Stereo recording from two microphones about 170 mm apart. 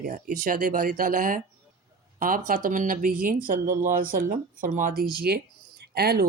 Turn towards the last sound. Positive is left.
turn(degrees=-65)  # may be behind; listen again after turning